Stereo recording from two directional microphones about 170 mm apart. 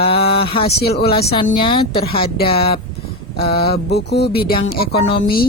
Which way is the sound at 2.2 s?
65° left (ahead or behind).